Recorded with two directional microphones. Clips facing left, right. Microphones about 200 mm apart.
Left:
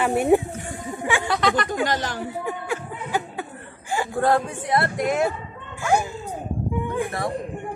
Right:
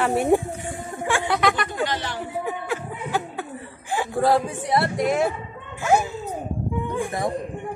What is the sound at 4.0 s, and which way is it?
A man's voice, centre (ahead or behind).